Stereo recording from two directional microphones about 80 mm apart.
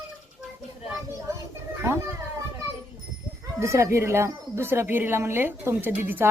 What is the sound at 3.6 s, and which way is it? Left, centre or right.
Speech, right.